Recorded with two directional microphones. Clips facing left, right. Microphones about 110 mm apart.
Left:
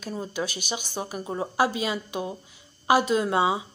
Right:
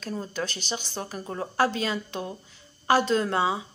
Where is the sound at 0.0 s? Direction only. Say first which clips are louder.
Left 1 dB; 10° left (ahead or behind).